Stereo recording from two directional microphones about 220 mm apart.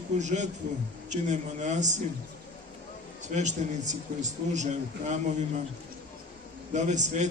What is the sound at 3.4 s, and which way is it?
A man's voice, 35° right (ahead or behind).